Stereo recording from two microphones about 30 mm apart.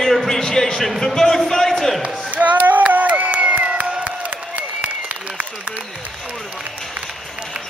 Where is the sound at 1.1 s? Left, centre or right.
Centre.